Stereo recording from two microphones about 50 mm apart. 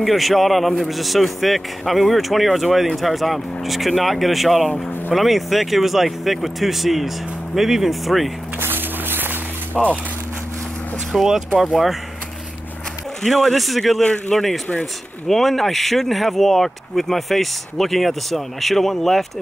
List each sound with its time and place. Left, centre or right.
0.0 s a man's voice: centre
4.6 s speech: centre
5.1 s a man's voice: centre
8.5 s music: right
9.8 s a man's voice: centre
11.1 s a man's voice: centre
13.2 s a man's voice: centre